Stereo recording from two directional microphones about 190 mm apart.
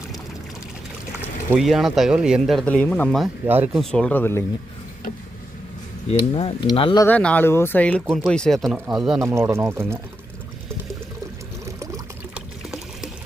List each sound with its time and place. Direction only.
1.2 s speech: 5° right (ahead or behind)
3.4 s speech: 10° right (ahead or behind)
3.9 s speech: 5° left (ahead or behind)
6.1 s speech: 30° left (ahead or behind)
7.0 s speech: 5° left (ahead or behind)
9.1 s speech: 15° right (ahead or behind)
11.6 s water: 15° right (ahead or behind)
12.3 s pour: centre (ahead or behind)